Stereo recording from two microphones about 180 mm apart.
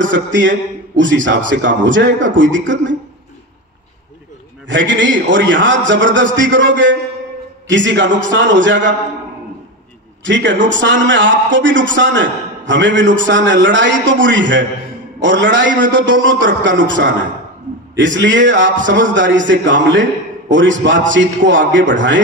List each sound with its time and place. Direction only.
0.0 s a man's voice: 90° right
4.6 s a man's voice: 90° right
10.2 s a man's voice: 85° right